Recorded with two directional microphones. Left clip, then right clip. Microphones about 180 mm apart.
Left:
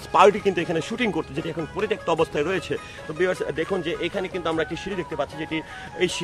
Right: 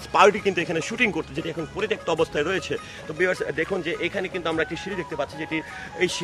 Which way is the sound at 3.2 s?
15° left (ahead or behind).